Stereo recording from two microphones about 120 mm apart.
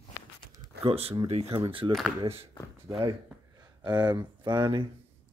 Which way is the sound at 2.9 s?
40° right (ahead or behind).